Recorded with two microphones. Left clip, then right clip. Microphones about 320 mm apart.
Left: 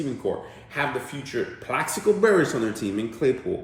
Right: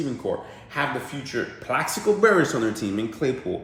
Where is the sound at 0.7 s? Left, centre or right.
Centre.